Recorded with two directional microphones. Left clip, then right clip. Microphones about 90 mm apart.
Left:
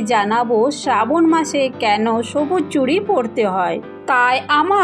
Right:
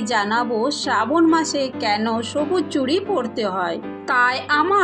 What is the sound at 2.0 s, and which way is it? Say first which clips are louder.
Speech: left 5 dB; 75° left (ahead or behind).